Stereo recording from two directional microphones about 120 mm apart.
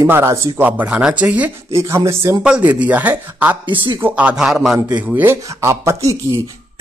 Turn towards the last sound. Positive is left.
turn(degrees=-25)  # may be behind; listen again after turning